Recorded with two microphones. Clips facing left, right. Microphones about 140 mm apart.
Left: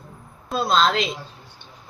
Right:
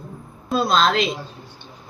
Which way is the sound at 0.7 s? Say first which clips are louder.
Even; 30° left (ahead or behind).